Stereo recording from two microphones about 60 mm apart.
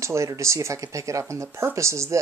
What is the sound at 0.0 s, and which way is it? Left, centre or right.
Speech, right.